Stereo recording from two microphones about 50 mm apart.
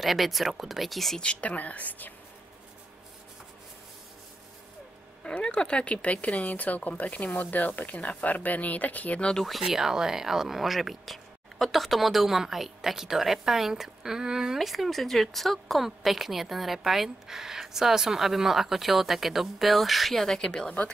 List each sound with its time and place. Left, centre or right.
0.0 s speech: centre
1.2 s a woman's voice: left
5.2 s speech: left
9.5 s speech: centre; by 20.9 s left